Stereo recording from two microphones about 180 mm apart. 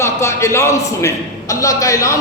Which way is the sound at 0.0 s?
15° left (ahead or behind).